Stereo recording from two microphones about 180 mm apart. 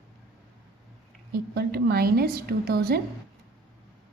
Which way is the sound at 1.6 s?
60° right (ahead or behind).